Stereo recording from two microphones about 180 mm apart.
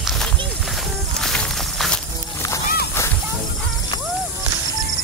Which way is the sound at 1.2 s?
5° left (ahead or behind).